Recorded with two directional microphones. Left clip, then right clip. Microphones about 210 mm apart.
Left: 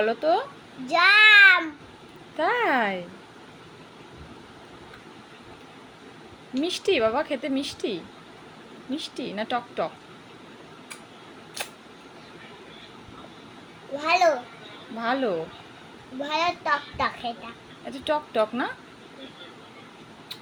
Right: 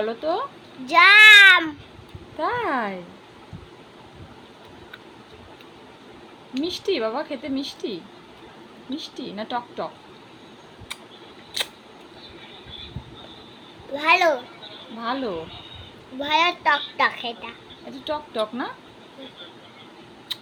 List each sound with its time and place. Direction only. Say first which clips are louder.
0.0 s a woman's voice: left 2 dB; 5° right (ahead or behind)
0.9 s child singing: right 5 dB; 20° right (ahead or behind)
2.4 s a woman's voice: left 2 dB; centre (ahead or behind)
6.6 s a woman's voice: left 2 dB; centre (ahead or behind)
9.0 s a woman's voice: left 2 dB; centre (ahead or behind)
13.9 s a child's voice: right 3 dB; 20° right (ahead or behind)
15.0 s a woman's voice: left 2 dB; centre (ahead or behind)
16.2 s a child's voice: right 6 dB; 20° right (ahead or behind)
18.0 s a woman's voice: left 2 dB; centre (ahead or behind)